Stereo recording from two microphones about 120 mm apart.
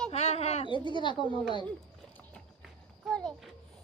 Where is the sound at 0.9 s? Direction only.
40° left (ahead or behind).